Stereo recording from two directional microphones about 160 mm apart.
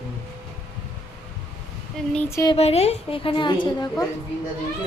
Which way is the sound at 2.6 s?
40° left (ahead or behind).